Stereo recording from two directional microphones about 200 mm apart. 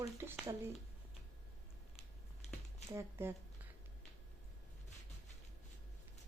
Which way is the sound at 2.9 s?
15° right (ahead or behind).